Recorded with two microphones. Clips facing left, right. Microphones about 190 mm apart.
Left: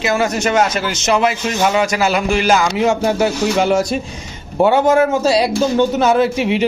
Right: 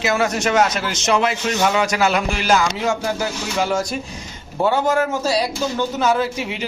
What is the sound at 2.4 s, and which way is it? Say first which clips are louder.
A man's voice: left 3 dB; 25° left (ahead or behind).